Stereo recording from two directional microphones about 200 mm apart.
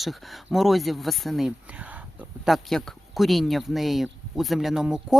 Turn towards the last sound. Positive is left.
turn(degrees=-5)  # may be behind; listen again after turning